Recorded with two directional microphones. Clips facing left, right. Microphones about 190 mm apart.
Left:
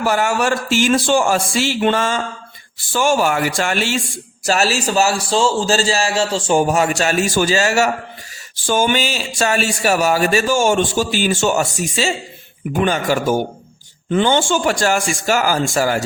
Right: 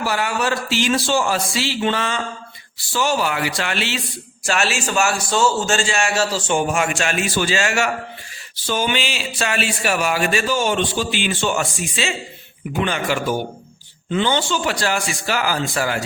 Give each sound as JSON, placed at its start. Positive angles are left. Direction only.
{"t": 0.0, "sound": "speech", "side_deg": 45}